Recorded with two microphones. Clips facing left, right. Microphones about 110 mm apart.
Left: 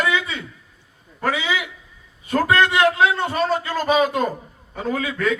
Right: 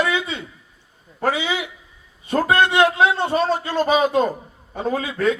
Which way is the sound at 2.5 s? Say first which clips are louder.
Right 1 dB; 25° right (ahead or behind).